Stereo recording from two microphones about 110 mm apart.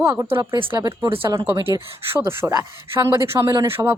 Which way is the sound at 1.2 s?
25° right (ahead or behind).